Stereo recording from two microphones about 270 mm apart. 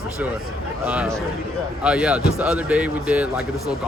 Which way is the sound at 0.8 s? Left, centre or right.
Centre.